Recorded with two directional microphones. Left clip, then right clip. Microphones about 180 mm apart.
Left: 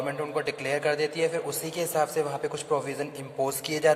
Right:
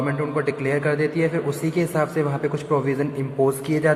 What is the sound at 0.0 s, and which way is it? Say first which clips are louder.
A man's voice: right 6 dB; 35° left (ahead or behind).